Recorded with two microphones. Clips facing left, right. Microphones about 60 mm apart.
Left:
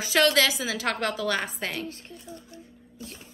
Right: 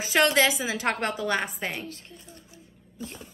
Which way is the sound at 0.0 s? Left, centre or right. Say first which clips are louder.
Even; right.